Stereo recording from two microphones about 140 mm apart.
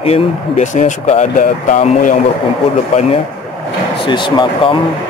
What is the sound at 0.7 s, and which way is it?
Speech, 55° left (ahead or behind).